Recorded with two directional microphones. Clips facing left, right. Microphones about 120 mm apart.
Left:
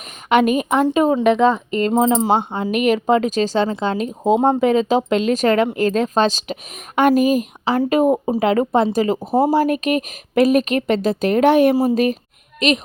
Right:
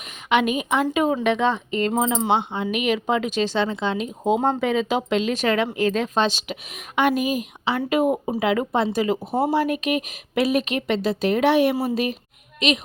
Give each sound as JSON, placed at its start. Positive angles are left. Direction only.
{"t": 0.3, "sound": "speech", "side_deg": 45}
{"t": 9.6, "sound": "a woman's voice", "side_deg": 45}